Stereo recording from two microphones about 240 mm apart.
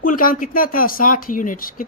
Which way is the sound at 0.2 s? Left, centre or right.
Left.